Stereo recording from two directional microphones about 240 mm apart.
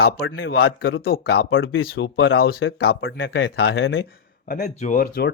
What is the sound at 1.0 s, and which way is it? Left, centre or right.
Speech, left.